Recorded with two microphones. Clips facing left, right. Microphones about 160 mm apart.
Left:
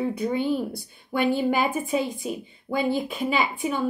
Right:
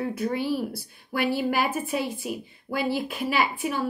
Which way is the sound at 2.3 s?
5° right (ahead or behind).